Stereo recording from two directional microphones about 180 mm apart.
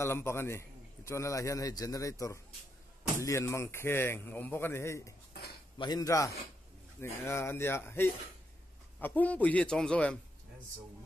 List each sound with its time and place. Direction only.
0.0 s a man's voice: 15° left (ahead or behind)